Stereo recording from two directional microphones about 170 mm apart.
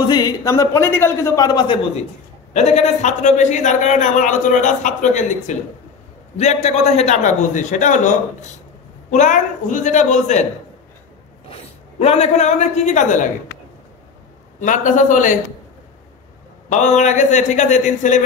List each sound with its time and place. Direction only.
0.0 s a man's voice: 25° left (ahead or behind)
2.5 s a man's voice: 40° left (ahead or behind)
11.5 s a man's voice: 35° left (ahead or behind)
14.6 s a man's voice: 50° left (ahead or behind)
16.6 s a man's voice: 45° left (ahead or behind)